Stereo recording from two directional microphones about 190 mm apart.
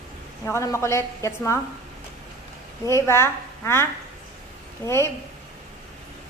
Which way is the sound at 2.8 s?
15° left (ahead or behind).